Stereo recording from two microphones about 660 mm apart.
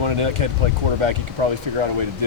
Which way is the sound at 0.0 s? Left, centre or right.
Right.